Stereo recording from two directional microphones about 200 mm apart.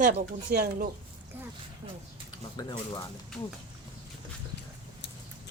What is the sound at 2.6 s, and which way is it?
Speech, 20° left (ahead or behind).